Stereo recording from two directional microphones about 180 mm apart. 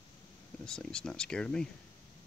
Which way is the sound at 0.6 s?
5° left (ahead or behind).